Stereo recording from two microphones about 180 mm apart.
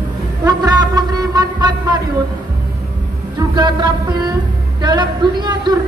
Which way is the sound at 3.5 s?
25° right (ahead or behind).